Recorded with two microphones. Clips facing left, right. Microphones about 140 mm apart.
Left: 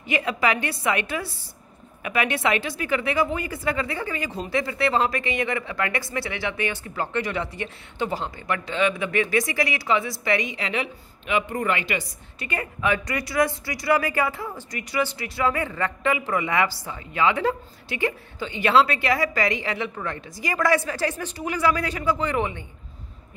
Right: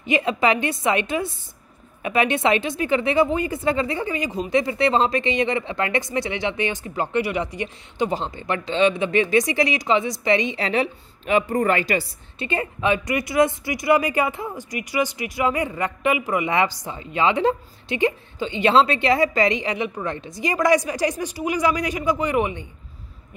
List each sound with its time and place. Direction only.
0.0 s speech: 25° right (ahead or behind); by 12.1 s 40° right (ahead or behind)
12.4 s speech: 25° right (ahead or behind)